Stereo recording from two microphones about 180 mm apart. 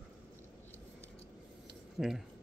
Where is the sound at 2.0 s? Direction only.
5° right (ahead or behind).